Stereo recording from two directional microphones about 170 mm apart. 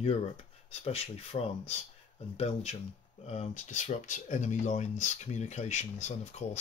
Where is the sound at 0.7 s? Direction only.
40° left (ahead or behind).